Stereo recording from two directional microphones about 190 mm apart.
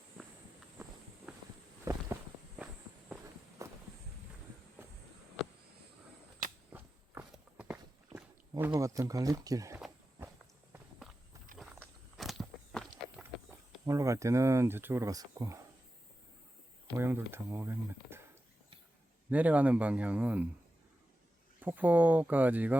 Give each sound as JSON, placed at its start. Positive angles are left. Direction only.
{"t": 0.8, "sound": "walk", "side_deg": -5}
{"t": 3.6, "sound": "a sound", "side_deg": -15}
{"t": 6.7, "sound": "walk", "side_deg": -10}
{"t": 8.7, "sound": "speech", "side_deg": -15}
{"t": 11.5, "sound": "walk", "side_deg": 0}
{"t": 13.2, "sound": "speech", "side_deg": -15}
{"t": 17.0, "sound": "speech", "side_deg": -10}
{"t": 19.3, "sound": "speech", "side_deg": -10}
{"t": 21.6, "sound": "speech", "side_deg": -10}